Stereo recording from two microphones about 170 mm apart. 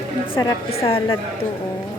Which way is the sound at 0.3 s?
35° left (ahead or behind).